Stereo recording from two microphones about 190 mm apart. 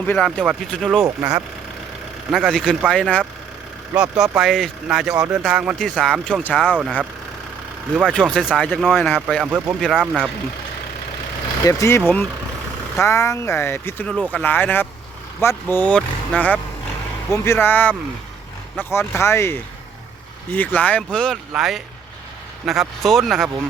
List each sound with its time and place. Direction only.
0.0 s speech: 5° left (ahead or behind)
1.0 s speech: 15° right (ahead or behind)
2.3 s speech: centre (ahead or behind)
3.9 s speech: 5° right (ahead or behind)
8.0 s speech: 5° left (ahead or behind)
11.6 s speech: 15° left (ahead or behind)
20.6 s speech: 10° left (ahead or behind)